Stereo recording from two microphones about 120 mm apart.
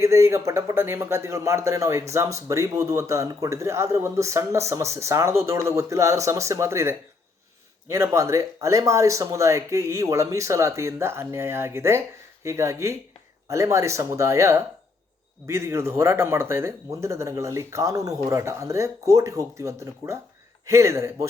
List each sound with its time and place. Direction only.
0.0 s speech: 25° right (ahead or behind)